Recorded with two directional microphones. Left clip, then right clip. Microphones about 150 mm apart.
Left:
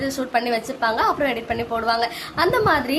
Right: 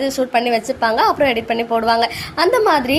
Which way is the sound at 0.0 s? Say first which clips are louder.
Right 5 dB; 20° right (ahead or behind).